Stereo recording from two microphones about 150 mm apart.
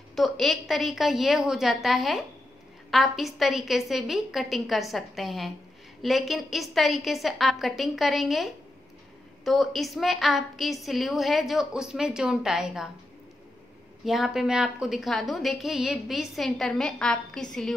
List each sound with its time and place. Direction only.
0.1 s a woman's voice: centre (ahead or behind)
14.0 s a woman's voice: centre (ahead or behind)